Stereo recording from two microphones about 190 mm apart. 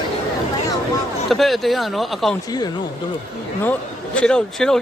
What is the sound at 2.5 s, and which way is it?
Speech, 20° left (ahead or behind).